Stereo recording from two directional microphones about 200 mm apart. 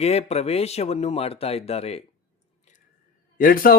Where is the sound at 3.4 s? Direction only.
45° left (ahead or behind).